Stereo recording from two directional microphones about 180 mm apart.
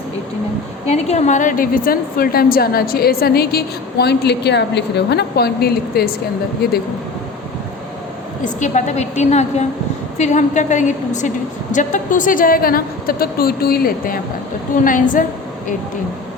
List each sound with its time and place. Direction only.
0.9 s a woman's voice: 35° left (ahead or behind); by 6.1 s 60° left (ahead or behind)
8.5 s a woman's voice: 40° left (ahead or behind)